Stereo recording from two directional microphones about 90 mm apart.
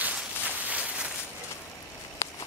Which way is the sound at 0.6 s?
15° right (ahead or behind).